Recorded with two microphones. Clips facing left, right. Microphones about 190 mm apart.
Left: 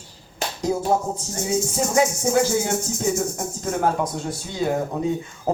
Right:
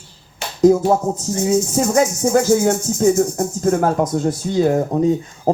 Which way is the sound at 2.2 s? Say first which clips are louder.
Right 6 dB; 45° right (ahead or behind).